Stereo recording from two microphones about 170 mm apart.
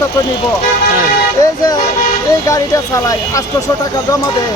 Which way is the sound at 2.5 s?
20° left (ahead or behind).